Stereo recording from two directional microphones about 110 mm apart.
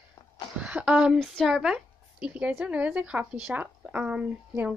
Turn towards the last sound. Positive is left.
turn(degrees=-15)  # may be behind; listen again after turning